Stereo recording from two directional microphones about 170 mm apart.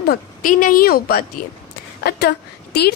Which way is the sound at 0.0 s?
60° left (ahead or behind).